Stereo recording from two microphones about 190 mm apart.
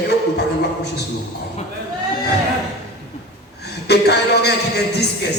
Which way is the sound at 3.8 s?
60° left (ahead or behind).